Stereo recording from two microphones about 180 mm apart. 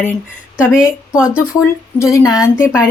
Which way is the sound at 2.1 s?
20° left (ahead or behind).